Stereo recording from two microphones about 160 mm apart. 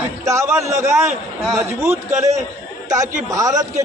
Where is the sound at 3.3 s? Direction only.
20° right (ahead or behind).